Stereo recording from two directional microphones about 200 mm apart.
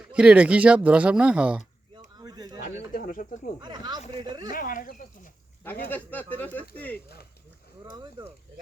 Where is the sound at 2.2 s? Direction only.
20° right (ahead or behind).